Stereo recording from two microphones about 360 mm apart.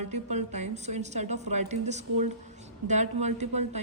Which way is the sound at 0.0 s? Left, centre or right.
Centre.